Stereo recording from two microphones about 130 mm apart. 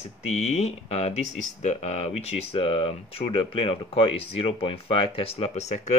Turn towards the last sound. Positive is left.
turn(degrees=60)  # may be behind; listen again after turning